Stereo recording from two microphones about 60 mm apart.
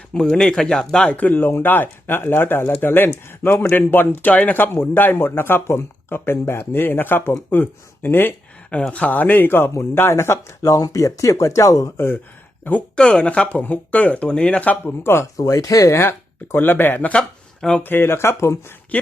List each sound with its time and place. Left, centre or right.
0.1 s speech: centre
1.1 s a man's voice: left
8.9 s a man's voice: left
10.3 s speech: left
13.0 s speech: centre
15.0 s speech: left
15.4 s speech: left
16.0 s a man's voice: left
17.1 s speech: centre
17.8 s speech: left